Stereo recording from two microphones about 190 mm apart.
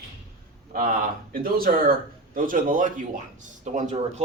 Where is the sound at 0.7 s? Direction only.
50° right (ahead or behind).